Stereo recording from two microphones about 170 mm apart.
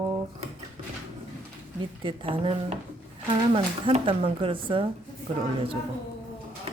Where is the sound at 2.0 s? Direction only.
30° right (ahead or behind).